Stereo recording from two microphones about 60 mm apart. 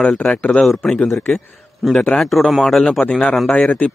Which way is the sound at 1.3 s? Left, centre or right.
Centre.